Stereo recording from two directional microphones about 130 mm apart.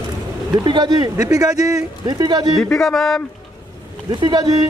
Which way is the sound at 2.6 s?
5° left (ahead or behind).